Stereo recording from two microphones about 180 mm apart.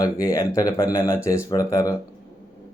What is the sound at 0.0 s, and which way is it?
Speech, 20° left (ahead or behind).